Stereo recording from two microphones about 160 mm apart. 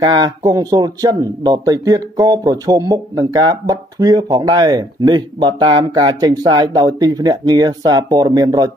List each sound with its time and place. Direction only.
0.0 s speech: 25° right (ahead or behind)